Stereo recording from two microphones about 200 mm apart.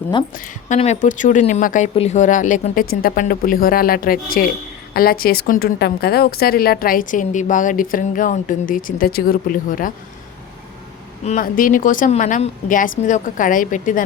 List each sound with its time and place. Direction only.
0.3 s a woman's voice: 40° left (ahead or behind)
11.2 s speech: 35° left (ahead or behind)